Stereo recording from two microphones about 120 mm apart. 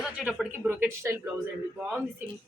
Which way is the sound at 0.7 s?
20° right (ahead or behind).